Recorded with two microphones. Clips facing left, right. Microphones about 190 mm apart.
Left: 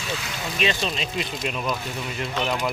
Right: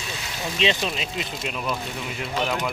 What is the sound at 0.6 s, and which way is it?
Speech, 20° right (ahead or behind).